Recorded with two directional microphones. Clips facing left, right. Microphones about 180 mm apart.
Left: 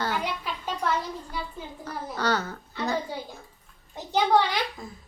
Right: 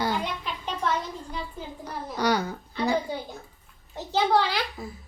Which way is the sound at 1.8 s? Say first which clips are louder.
Right 2 dB; 15° right (ahead or behind).